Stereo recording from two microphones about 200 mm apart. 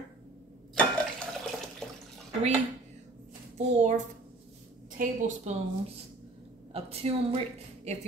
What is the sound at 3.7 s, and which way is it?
Speech, 40° right (ahead or behind).